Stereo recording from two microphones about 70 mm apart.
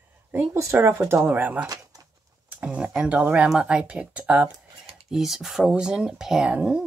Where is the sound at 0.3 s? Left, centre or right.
Right.